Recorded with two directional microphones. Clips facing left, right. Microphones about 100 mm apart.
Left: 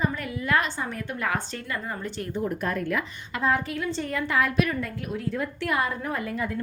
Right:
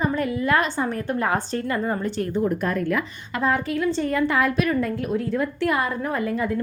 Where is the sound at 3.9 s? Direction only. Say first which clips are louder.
Right 5 dB; 40° right (ahead or behind).